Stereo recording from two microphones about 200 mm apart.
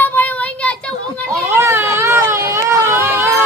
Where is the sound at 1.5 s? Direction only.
10° right (ahead or behind).